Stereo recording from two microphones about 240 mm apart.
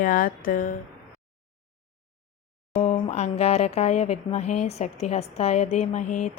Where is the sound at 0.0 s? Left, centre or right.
Left.